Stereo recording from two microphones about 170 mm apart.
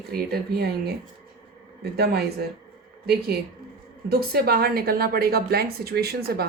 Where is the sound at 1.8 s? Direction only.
75° right (ahead or behind).